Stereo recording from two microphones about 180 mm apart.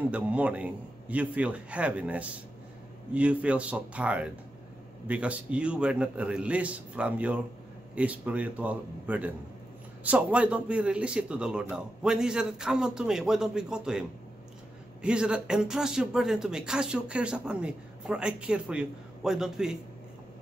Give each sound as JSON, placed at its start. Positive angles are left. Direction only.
{"t": 0.1, "sound": "a man's voice", "side_deg": -5}